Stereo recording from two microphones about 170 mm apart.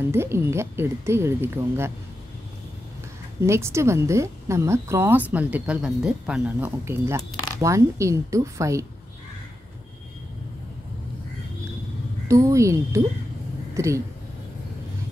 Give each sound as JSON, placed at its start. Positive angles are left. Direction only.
{"t": 0.1, "sound": "a woman's voice", "side_deg": -15}
{"t": 3.3, "sound": "a woman's voice", "side_deg": -15}
{"t": 12.3, "sound": "a woman's voice", "side_deg": -20}